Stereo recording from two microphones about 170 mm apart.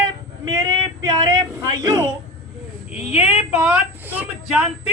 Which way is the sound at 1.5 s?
20° right (ahead or behind).